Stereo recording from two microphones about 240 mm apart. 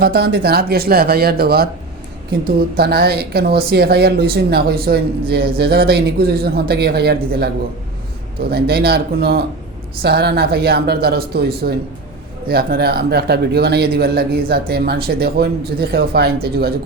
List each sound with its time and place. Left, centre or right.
0.0 s speech: right